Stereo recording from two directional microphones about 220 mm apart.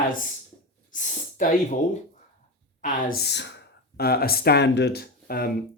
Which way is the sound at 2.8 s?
45° left (ahead or behind).